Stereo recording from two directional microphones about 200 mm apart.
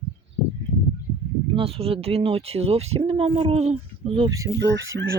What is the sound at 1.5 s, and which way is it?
Speech, 30° right (ahead or behind).